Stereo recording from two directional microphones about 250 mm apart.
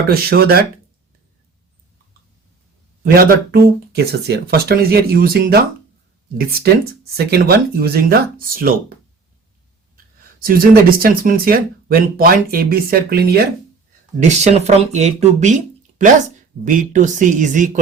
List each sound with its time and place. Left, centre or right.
0.1 s speech: right
3.0 s speech: right
10.4 s speech: right
14.2 s speech: right